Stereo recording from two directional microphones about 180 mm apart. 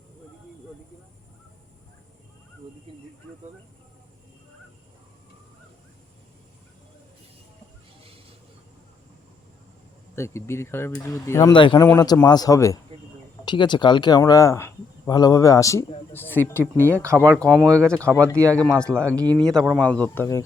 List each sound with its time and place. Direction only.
10.2 s speech: 15° left (ahead or behind)
17.0 s speech: 15° right (ahead or behind)
17.4 s speech: centre (ahead or behind)
19.1 s speech: 20° right (ahead or behind)
19.4 s speech: 5° left (ahead or behind)